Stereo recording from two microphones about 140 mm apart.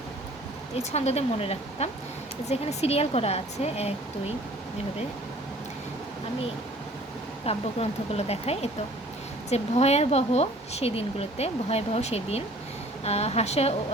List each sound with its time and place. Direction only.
0.8 s a woman's voice: 50° left (ahead or behind)
7.4 s a woman's voice: 45° left (ahead or behind)